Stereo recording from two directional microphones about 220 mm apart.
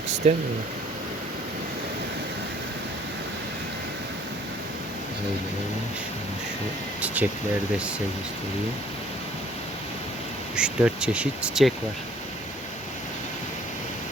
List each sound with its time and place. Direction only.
0.2 s speech: 30° right (ahead or behind)
7.0 s speech: 5° right (ahead or behind)
10.5 s speech: 5° right (ahead or behind)